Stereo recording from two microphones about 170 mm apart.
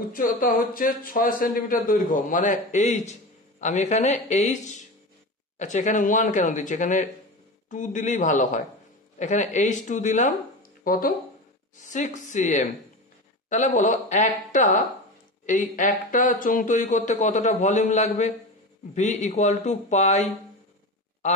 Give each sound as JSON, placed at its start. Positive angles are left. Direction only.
{"t": 0.1, "sound": "speech", "side_deg": 55}